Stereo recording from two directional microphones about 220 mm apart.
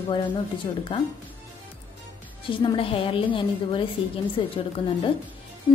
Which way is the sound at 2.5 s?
20° left (ahead or behind).